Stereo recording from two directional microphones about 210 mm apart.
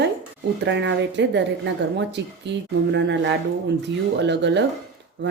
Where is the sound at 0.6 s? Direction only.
60° right (ahead or behind).